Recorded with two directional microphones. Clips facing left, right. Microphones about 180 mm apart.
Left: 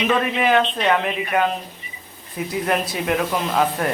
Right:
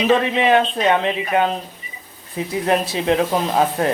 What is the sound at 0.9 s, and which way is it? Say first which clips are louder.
Speech: right 2 dB; 25° right (ahead or behind).